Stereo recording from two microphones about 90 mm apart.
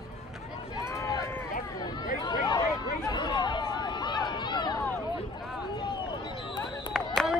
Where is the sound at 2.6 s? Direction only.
45° left (ahead or behind).